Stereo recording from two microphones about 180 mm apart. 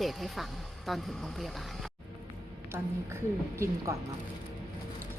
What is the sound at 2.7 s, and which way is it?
A woman's voice, 15° right (ahead or behind).